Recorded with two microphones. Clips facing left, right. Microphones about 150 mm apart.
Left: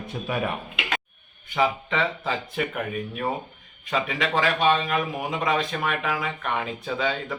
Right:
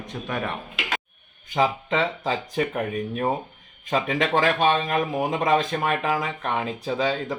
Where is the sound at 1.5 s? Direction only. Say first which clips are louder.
Right 2 dB; 35° right (ahead or behind).